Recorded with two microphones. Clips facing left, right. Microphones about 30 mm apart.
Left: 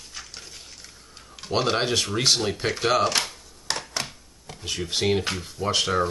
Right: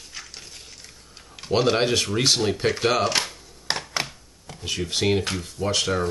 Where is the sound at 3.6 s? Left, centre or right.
Right.